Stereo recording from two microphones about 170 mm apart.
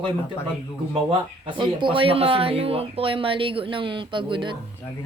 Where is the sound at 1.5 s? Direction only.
30° right (ahead or behind).